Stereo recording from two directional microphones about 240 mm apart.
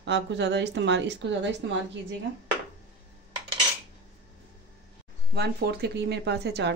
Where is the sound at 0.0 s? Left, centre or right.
Right.